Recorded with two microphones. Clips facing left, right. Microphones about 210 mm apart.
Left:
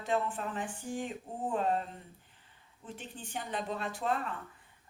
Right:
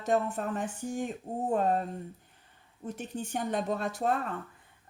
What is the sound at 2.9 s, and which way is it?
Speech, 45° right (ahead or behind).